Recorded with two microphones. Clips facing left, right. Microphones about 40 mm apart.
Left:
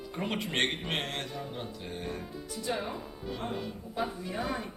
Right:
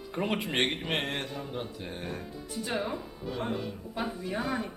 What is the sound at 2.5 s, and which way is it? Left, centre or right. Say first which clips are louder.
Speech: right 1 dB; right.